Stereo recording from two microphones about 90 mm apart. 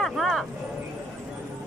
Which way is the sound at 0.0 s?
Centre (ahead or behind).